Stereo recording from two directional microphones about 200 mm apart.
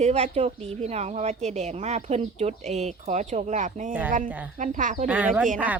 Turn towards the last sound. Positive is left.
turn(degrees=-10)  # may be behind; listen again after turning